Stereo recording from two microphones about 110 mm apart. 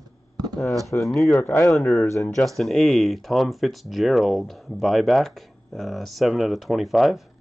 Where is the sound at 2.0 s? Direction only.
25° left (ahead or behind).